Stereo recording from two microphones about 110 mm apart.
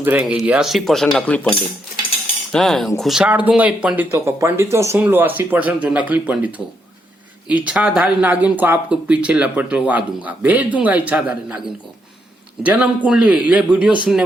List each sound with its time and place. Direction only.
0.0 s speech: 15° right (ahead or behind)
3.2 s speech: 15° right (ahead or behind)
4.1 s speech: 25° right (ahead or behind); by 14.3 s 5° right (ahead or behind)